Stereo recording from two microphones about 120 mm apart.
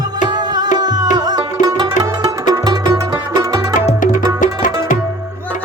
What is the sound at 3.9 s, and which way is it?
Music, 90° left.